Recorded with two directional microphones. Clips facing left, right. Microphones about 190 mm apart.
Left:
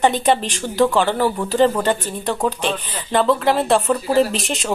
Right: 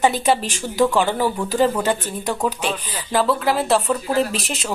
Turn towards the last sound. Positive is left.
turn(degrees=0)  # may be behind; listen again after turning